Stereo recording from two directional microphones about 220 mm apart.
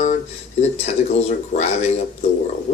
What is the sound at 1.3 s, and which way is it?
Speech, 30° left (ahead or behind).